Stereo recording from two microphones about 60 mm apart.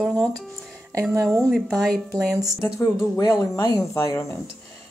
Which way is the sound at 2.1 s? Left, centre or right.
Right.